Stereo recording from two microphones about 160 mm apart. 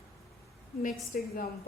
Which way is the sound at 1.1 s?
60° left (ahead or behind).